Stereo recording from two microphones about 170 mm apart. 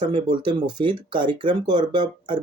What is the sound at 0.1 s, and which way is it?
Speech, 30° right (ahead or behind).